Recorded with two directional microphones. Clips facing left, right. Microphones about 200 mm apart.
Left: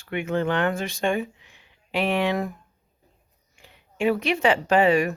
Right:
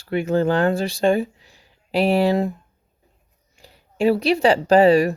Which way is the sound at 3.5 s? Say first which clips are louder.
Right 5 dB; 35° right (ahead or behind).